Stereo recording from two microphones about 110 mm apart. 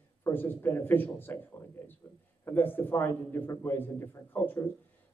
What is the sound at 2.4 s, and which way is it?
A man's voice, 20° left (ahead or behind).